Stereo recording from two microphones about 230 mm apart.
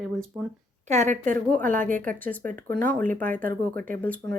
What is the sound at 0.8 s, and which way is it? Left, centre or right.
Speech, right.